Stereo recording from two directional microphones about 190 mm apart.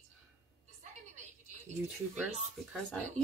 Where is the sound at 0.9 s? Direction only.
40° right (ahead or behind).